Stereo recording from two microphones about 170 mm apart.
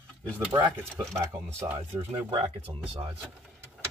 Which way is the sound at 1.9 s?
35° right (ahead or behind).